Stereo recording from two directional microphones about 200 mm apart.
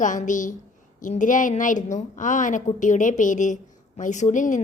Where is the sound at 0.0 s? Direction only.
40° left (ahead or behind).